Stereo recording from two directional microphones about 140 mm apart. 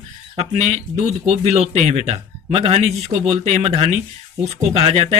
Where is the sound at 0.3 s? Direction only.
55° right (ahead or behind).